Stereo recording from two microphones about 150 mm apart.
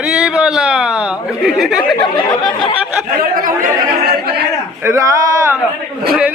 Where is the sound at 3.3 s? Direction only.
65° right (ahead or behind).